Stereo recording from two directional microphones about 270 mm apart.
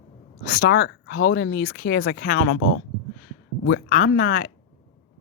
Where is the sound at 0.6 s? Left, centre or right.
Left.